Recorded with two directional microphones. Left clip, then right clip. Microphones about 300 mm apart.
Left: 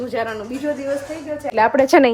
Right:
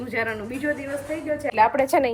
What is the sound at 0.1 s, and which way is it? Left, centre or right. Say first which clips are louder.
Speech: left 3 dB; centre.